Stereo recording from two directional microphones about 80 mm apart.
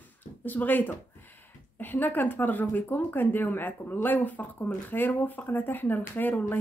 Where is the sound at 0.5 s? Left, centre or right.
Left.